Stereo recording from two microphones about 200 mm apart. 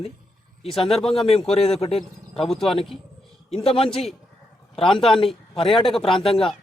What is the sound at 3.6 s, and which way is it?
Speech, 30° left (ahead or behind).